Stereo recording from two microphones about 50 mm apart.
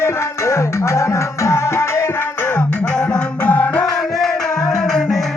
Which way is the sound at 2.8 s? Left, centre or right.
Centre.